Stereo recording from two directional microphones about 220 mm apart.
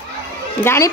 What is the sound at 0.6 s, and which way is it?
Speech, 10° left (ahead or behind).